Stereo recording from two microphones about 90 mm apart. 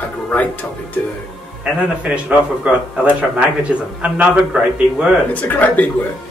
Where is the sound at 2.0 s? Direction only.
15° right (ahead or behind).